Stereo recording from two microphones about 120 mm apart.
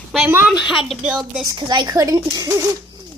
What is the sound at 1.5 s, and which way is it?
A woman's voice, 35° right (ahead or behind).